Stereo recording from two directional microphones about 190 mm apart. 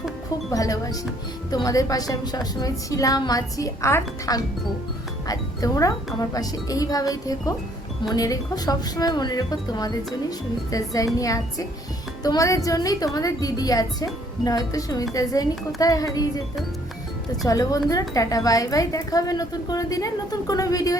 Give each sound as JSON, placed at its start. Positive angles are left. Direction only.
{"t": 0.5, "sound": "a woman's voice", "side_deg": 20}
{"t": 17.4, "sound": "a woman's voice", "side_deg": 20}